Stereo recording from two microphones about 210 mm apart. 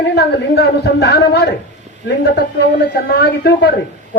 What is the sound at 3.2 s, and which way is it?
Speech, 50° left (ahead or behind).